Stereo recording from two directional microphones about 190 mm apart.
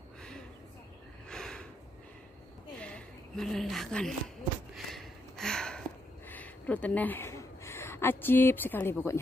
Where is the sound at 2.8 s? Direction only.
5° left (ahead or behind).